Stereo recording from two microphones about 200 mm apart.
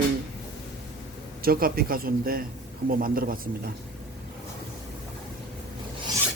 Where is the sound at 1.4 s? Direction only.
45° right (ahead or behind).